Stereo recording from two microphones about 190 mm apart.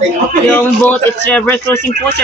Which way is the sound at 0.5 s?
10° left (ahead or behind).